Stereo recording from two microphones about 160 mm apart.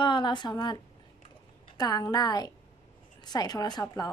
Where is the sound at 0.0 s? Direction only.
30° left (ahead or behind).